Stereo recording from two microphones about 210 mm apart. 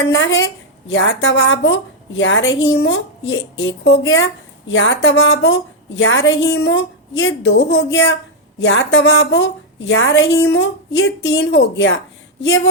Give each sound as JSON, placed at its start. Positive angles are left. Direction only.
{"t": 0.0, "sound": "a woman's voice", "side_deg": 65}